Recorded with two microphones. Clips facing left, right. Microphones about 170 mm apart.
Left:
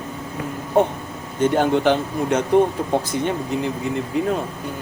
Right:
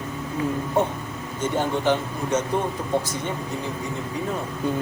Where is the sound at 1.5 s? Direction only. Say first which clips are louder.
Left 4 dB; 90° left.